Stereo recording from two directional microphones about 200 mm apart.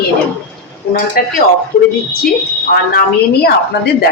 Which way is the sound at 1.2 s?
45° left (ahead or behind).